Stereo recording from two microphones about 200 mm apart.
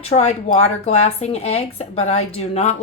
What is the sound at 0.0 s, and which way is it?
Speech, 30° left (ahead or behind).